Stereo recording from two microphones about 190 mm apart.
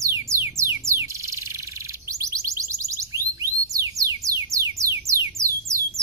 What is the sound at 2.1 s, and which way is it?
Music, 15° right (ahead or behind).